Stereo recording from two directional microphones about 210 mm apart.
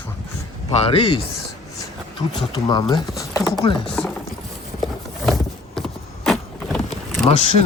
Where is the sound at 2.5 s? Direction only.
20° left (ahead or behind).